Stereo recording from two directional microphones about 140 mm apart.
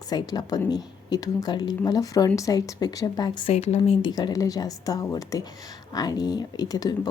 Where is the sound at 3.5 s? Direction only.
50° left (ahead or behind).